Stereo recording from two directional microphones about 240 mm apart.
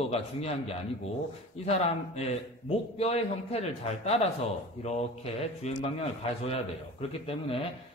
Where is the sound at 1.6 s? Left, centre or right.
Left.